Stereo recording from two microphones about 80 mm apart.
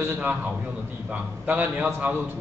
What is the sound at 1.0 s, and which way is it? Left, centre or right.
Speech, centre.